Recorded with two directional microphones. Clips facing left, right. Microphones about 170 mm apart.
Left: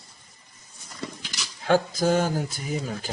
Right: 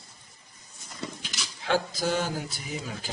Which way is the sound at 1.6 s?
45° left (ahead or behind).